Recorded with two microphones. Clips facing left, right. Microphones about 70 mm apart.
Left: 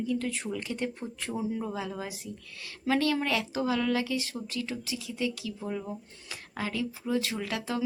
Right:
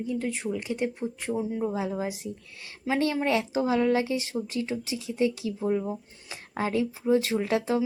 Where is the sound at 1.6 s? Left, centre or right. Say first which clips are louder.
Right 6 dB; right.